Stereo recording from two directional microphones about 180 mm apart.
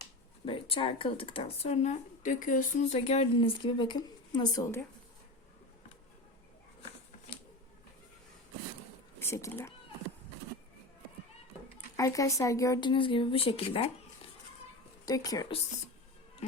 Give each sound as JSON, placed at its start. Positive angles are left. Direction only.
{"t": 0.4, "sound": "speech", "side_deg": 30}
{"t": 9.1, "sound": "speech", "side_deg": 15}
{"t": 11.9, "sound": "speech", "side_deg": 15}
{"t": 15.0, "sound": "speech", "side_deg": 20}
{"t": 16.4, "sound": "music", "side_deg": 40}